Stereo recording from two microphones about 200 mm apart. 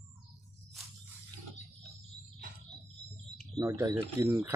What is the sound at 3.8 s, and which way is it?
Speech, 15° right (ahead or behind).